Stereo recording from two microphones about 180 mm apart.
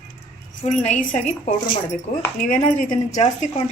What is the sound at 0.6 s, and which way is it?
A woman's voice, 40° left (ahead or behind).